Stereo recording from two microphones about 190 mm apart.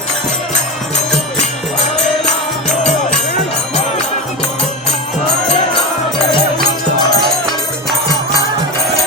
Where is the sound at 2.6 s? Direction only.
35° left (ahead or behind).